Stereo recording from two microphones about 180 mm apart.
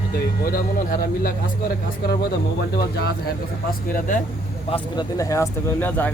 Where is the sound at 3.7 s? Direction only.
50° left (ahead or behind).